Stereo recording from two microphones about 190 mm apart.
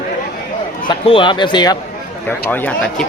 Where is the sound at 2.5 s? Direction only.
10° left (ahead or behind).